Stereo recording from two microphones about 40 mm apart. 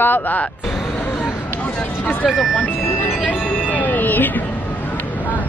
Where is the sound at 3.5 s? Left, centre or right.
Left.